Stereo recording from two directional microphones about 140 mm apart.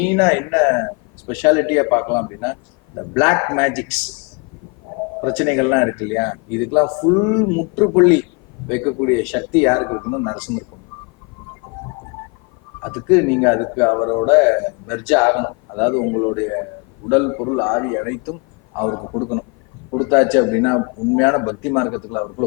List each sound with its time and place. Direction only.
0.0 s a man's voice: 10° left (ahead or behind)
5.2 s a man's voice: 10° left (ahead or behind)
12.8 s a man's voice: 15° left (ahead or behind)